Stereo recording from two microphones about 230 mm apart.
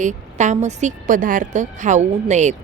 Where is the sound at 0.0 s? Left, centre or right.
Right.